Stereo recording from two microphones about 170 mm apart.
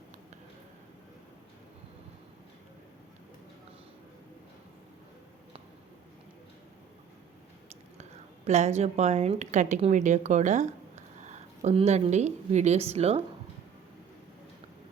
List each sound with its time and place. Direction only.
8.4 s a woman's voice: 40° right (ahead or behind)